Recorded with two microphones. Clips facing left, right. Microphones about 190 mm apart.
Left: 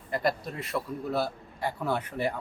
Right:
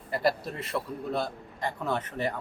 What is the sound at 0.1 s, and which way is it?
A man's voice, 5° right (ahead or behind).